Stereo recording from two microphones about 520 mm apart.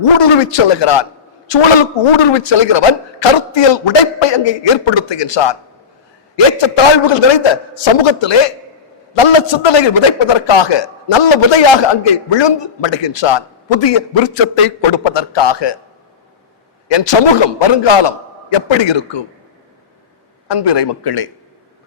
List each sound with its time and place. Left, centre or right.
0.2 s a man's voice: left
16.9 s a man's voice: left
20.5 s a man's voice: left